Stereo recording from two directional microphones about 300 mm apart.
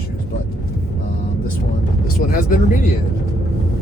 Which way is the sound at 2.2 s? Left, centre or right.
Left.